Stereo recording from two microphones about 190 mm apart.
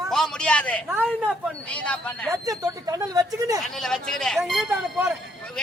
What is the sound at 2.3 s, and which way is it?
Speech, 15° right (ahead or behind).